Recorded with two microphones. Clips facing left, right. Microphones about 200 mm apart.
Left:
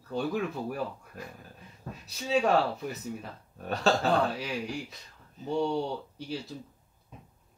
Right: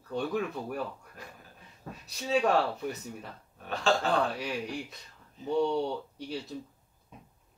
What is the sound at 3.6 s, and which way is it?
Speech, 40° left (ahead or behind).